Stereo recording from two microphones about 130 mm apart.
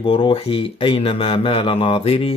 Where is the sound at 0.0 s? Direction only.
45° left (ahead or behind).